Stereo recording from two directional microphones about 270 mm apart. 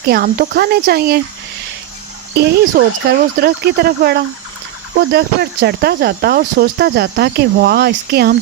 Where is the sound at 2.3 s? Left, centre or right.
Right.